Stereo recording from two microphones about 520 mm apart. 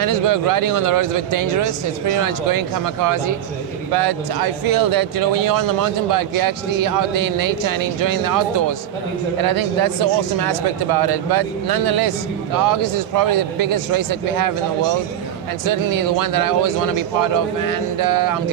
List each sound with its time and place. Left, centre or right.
0.0 s speech: right
15.6 s speech: right